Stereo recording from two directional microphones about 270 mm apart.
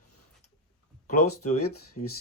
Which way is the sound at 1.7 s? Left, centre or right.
Left.